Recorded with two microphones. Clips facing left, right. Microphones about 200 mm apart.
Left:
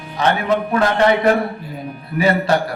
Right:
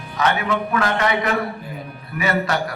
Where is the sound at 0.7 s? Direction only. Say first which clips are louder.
Left 6 dB; 30° left (ahead or behind).